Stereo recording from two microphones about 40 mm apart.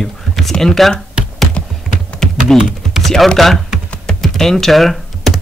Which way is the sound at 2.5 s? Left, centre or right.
Centre.